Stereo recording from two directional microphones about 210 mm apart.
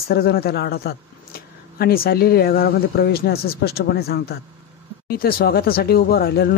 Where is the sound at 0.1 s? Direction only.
45° left (ahead or behind).